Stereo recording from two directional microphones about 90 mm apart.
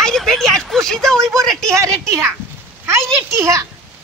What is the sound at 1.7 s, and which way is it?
Speech, 35° right (ahead or behind).